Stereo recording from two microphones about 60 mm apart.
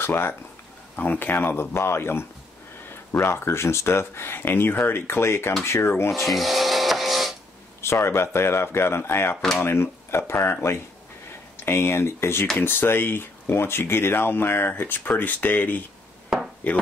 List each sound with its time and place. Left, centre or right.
0.0 s speech: left
6.1 s printer: centre
7.8 s speech: left